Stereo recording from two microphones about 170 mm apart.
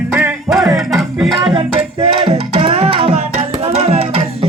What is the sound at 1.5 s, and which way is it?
Music, 30° right (ahead or behind).